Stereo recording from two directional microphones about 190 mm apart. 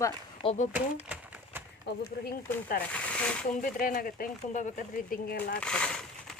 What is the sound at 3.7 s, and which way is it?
Speech, 45° left (ahead or behind).